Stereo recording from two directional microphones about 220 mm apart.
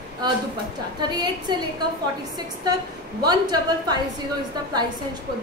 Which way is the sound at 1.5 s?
20° right (ahead or behind).